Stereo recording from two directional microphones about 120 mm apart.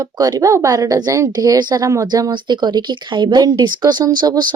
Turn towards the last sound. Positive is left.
turn(degrees=-35)  # may be behind; listen again after turning